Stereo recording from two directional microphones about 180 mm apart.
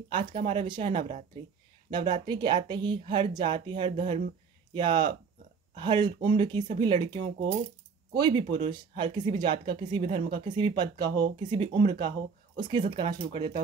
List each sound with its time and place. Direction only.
0.1 s speech: 25° right (ahead or behind)